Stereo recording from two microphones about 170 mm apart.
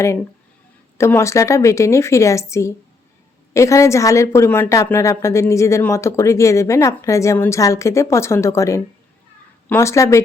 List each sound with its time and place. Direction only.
0.9 s a woman's voice: 15° left (ahead or behind)